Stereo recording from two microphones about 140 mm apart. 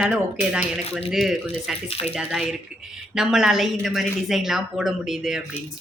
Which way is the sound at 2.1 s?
Centre (ahead or behind).